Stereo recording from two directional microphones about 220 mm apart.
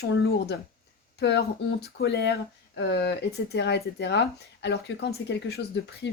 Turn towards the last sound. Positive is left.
turn(degrees=50)  # may be behind; listen again after turning